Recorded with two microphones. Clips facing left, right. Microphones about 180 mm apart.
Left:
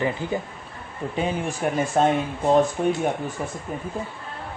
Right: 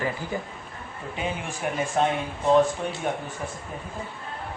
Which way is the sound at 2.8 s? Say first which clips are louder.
Left 8 dB; 50° left (ahead or behind).